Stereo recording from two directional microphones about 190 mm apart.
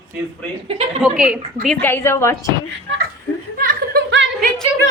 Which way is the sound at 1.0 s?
5° right (ahead or behind).